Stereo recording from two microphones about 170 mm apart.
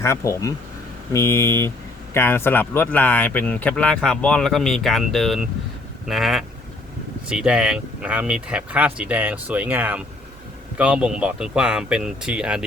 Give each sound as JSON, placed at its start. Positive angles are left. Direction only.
{"t": 0.0, "sound": "speech", "side_deg": 15}